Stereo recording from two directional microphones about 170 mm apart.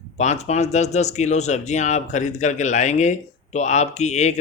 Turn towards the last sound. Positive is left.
turn(degrees=40)  # may be behind; listen again after turning